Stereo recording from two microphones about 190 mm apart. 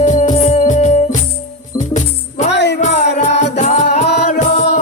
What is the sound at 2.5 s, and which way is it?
Music, 65° left (ahead or behind).